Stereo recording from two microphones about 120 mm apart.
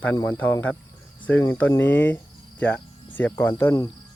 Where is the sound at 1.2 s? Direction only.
15° left (ahead or behind).